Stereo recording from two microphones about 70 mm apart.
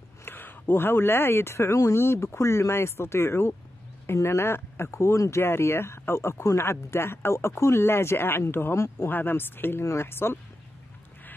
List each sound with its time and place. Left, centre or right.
0.2 s speech: left